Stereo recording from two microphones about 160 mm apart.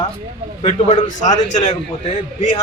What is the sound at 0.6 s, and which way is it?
Speech, 40° left (ahead or behind).